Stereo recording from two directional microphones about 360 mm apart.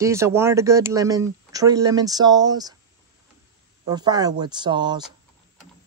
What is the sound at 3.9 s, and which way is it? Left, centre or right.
Speech, centre.